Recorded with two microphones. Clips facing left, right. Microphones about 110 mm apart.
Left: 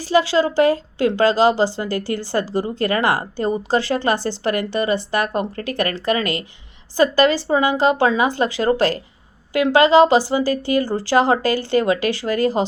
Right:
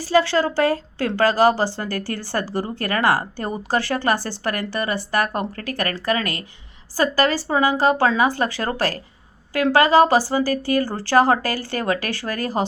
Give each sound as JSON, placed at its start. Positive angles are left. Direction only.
{"t": 0.1, "sound": "a woman's voice", "side_deg": 20}